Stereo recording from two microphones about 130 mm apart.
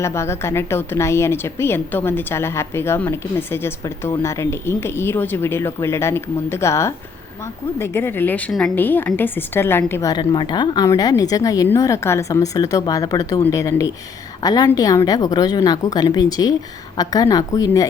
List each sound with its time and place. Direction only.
0.0 s a woman's voice: 20° left (ahead or behind)
10.1 s a woman's voice: 35° left (ahead or behind)